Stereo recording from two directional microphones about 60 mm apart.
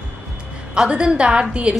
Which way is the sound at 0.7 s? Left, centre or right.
Centre.